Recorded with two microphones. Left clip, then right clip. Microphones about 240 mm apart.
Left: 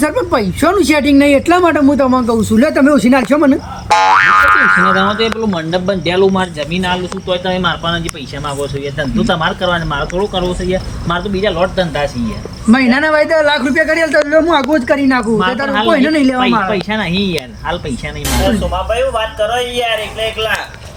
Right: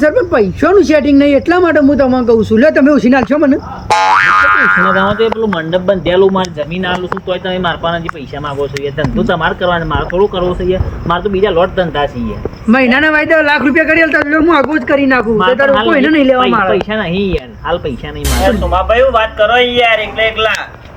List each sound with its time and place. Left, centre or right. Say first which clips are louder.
0.0 s a man's voice: right 4 dB; centre
3.8 s speech: even; centre
5.5 s a man's voice: right 3 dB; centre
18.3 s speech: right 3 dB; centre
18.6 s speech: right 6 dB; left